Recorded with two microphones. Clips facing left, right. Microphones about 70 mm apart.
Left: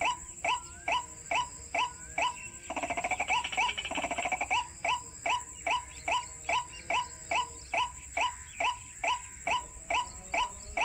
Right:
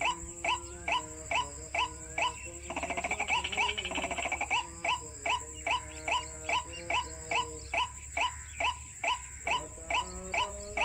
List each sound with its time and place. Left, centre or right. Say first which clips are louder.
0.0 s music: left 1 dB; centre